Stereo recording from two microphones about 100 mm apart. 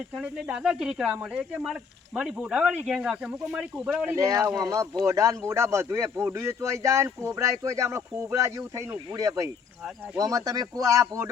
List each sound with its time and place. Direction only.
0.2 s speech: 10° right (ahead or behind)
4.1 s speech: 30° right (ahead or behind)